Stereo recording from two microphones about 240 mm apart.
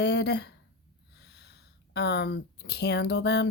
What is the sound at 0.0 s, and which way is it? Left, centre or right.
Speech, left.